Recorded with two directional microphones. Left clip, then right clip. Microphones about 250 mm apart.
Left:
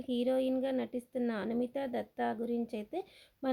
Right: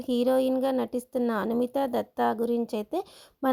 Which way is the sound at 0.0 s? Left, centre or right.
Right.